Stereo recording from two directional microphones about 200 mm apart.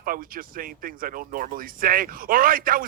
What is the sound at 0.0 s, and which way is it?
Speech, 45° right (ahead or behind).